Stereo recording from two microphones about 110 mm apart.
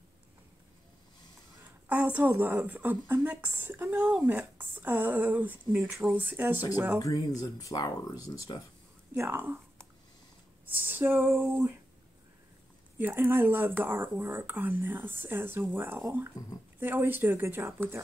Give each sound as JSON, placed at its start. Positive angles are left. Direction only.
{"t": 1.9, "sound": "speech", "side_deg": -15}
{"t": 7.0, "sound": "speech", "side_deg": 35}
{"t": 9.1, "sound": "speech", "side_deg": -20}
{"t": 10.9, "sound": "speech", "side_deg": -20}
{"t": 13.0, "sound": "speech", "side_deg": -20}